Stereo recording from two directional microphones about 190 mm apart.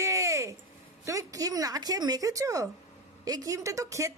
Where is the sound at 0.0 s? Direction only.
15° right (ahead or behind).